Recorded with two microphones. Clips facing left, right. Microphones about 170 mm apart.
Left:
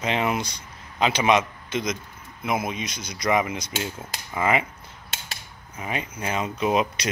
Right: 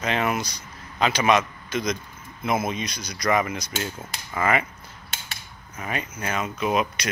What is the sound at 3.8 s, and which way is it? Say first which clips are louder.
Cutlery: even; 15° left (ahead or behind).